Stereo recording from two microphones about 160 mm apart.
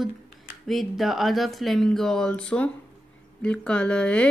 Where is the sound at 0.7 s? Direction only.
Centre (ahead or behind).